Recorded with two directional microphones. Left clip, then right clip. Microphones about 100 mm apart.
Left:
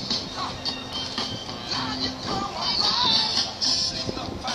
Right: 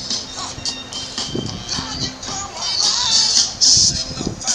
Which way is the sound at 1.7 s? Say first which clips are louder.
Right 3 dB; 45° right (ahead or behind).